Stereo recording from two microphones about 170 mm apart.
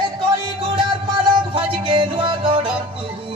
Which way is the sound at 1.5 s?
30° right (ahead or behind).